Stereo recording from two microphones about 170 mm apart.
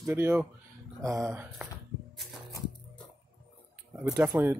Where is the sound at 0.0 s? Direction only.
15° right (ahead or behind).